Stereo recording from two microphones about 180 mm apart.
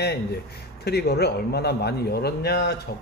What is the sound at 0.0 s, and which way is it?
A man's voice, 60° left (ahead or behind).